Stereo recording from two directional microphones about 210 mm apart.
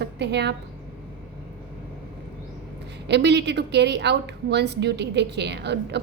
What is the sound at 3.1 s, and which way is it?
A woman's voice, 55° right (ahead or behind).